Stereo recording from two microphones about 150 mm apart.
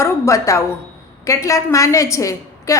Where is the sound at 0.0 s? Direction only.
20° left (ahead or behind).